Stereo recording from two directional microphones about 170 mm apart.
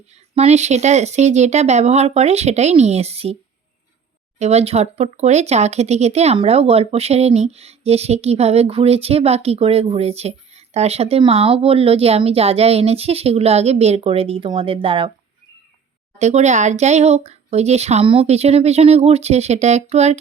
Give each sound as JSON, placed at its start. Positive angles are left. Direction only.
{"t": 0.3, "sound": "speech", "side_deg": -40}
{"t": 4.4, "sound": "speech", "side_deg": -40}
{"t": 16.1, "sound": "speech", "side_deg": -40}